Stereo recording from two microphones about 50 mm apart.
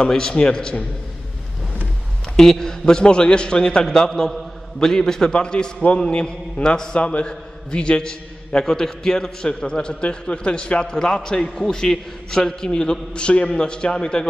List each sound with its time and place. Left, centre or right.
0.0 s a man's voice: centre
2.3 s a man's voice: centre